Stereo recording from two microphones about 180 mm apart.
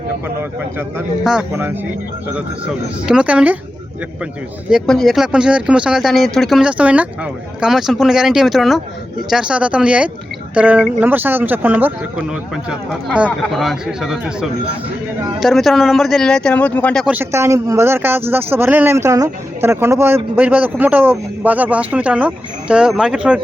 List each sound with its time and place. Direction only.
0.8 s speech: 5° right (ahead or behind)
4.7 s speech: centre (ahead or behind)
17.1 s speech: 10° right (ahead or behind)